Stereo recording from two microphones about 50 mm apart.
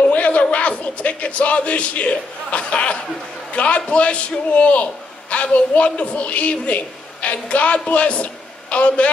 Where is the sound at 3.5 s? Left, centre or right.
Left.